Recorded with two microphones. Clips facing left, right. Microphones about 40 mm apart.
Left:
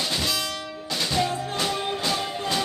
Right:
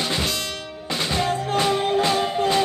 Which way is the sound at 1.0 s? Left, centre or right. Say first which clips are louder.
Right 2 dB; right.